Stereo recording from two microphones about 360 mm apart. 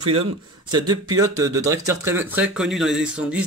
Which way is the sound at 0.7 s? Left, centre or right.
Centre.